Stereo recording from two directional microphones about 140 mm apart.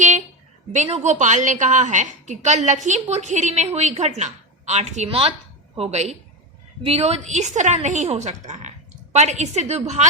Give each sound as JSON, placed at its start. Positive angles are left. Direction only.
{"t": 0.7, "sound": "a woman's voice", "side_deg": -55}